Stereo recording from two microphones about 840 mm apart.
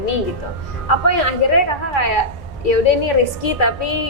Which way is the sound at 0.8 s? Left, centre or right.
Left.